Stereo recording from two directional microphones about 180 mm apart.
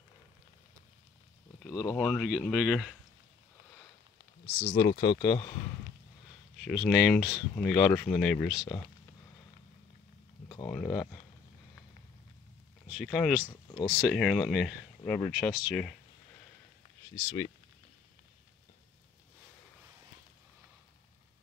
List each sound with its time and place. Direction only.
1.7 s speech: 20° left (ahead or behind)
2.0 s speech: centre (ahead or behind)
4.6 s speech: 40° left (ahead or behind)
4.8 s speech: 30° left (ahead or behind)
6.6 s speech: centre (ahead or behind)
7.5 s speech: 10° left (ahead or behind)
10.7 s speech: 15° left (ahead or behind)
12.8 s speech: 5° right (ahead or behind)
13.5 s speech: 25° left (ahead or behind)
13.8 s speech: 5° right (ahead or behind)
15.0 s speech: 15° left (ahead or behind)
15.3 s speech: centre (ahead or behind)
17.1 s speech: 15° left (ahead or behind)